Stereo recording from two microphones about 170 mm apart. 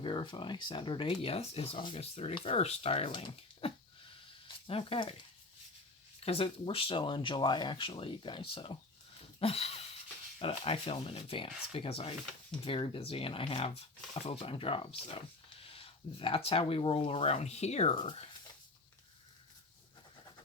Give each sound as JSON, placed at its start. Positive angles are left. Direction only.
{"t": 0.0, "sound": "speech", "side_deg": 30}
{"t": 6.1, "sound": "speech", "side_deg": 35}